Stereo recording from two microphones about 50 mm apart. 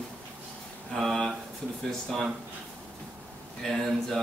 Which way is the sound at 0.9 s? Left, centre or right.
Centre.